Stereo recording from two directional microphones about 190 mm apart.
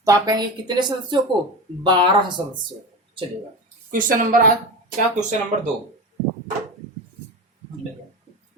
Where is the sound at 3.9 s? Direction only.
45° right (ahead or behind).